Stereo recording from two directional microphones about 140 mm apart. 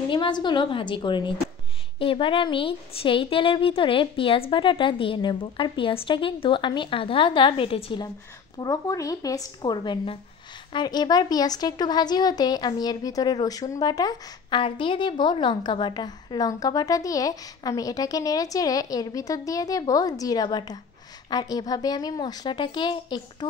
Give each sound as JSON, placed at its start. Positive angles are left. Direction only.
{"t": 0.1, "sound": "a woman's voice", "side_deg": 35}
{"t": 8.5, "sound": "a woman's voice", "side_deg": 25}